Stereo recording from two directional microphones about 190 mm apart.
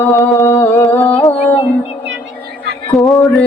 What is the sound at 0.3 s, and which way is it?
Music, 15° left (ahead or behind).